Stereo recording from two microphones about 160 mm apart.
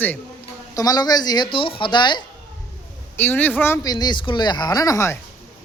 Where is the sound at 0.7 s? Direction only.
25° left (ahead or behind).